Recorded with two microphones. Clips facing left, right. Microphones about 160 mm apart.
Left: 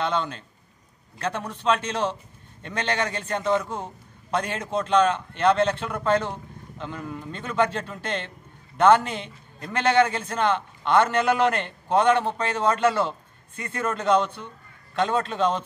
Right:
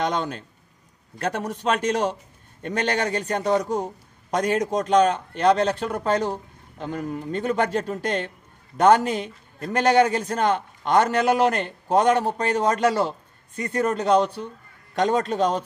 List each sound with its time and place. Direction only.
1.4 s a man's voice: 40° right (ahead or behind)